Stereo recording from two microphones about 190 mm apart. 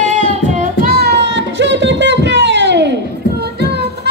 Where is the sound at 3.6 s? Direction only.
60° right (ahead or behind).